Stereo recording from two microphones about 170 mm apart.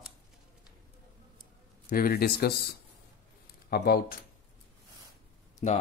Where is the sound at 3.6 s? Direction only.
65° left (ahead or behind).